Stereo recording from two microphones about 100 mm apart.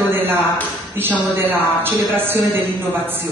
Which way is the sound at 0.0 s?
20° right (ahead or behind).